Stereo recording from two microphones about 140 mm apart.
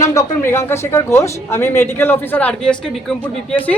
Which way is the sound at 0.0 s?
25° left (ahead or behind).